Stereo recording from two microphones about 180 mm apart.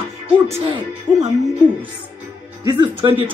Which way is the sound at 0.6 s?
30° right (ahead or behind).